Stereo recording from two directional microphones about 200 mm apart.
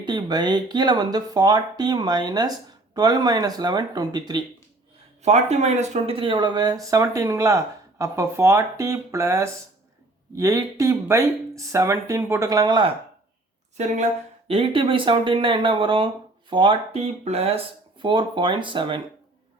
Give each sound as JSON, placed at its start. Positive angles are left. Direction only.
{"t": 0.0, "sound": "speech", "side_deg": -20}
{"t": 5.2, "sound": "speech", "side_deg": -35}
{"t": 13.7, "sound": "speech", "side_deg": -35}